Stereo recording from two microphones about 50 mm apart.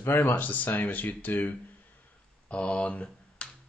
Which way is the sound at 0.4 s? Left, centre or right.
Left.